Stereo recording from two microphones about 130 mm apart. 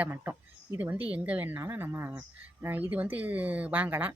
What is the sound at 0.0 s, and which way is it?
A woman's voice, 15° right (ahead or behind).